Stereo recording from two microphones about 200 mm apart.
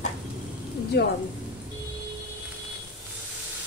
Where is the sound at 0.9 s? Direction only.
55° left (ahead or behind).